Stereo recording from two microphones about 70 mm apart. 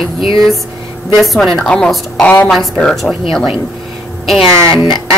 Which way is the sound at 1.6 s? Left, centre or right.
Centre.